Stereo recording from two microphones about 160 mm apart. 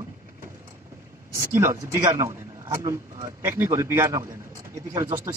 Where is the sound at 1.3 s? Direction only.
20° right (ahead or behind).